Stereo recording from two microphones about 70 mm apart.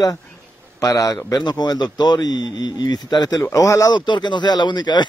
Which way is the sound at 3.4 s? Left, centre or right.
Left.